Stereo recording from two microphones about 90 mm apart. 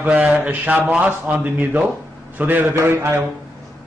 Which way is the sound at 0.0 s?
15° right (ahead or behind).